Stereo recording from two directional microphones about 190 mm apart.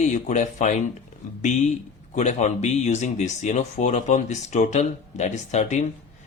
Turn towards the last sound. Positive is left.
turn(degrees=40)  # may be behind; listen again after turning